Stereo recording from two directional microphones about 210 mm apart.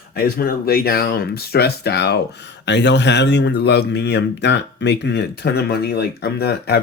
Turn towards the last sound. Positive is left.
turn(degrees=50)  # may be behind; listen again after turning